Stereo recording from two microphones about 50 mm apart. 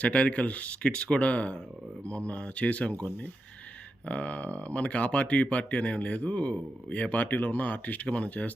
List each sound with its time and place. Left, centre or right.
0.0 s speech: left
4.1 s speech: left